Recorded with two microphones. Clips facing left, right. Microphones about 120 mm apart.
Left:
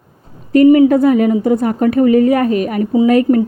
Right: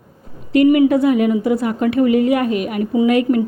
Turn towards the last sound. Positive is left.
turn(degrees=40)  # may be behind; listen again after turning